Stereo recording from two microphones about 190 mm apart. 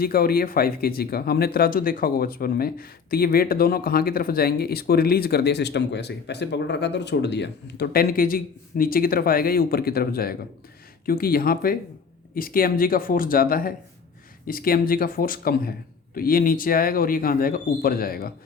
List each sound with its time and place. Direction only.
0.0 s speech: 50° left (ahead or behind)